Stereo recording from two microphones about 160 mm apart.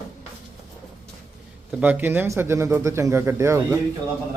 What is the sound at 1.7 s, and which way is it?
Speech, 10° right (ahead or behind).